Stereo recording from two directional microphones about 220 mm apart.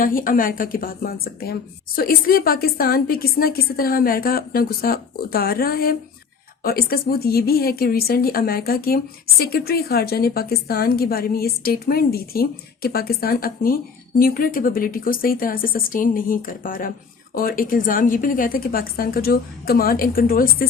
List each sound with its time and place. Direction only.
0.0 s a woman's voice: 40° left (ahead or behind)